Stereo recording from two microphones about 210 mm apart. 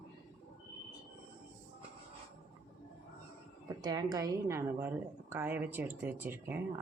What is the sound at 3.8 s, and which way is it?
Speech, 15° right (ahead or behind).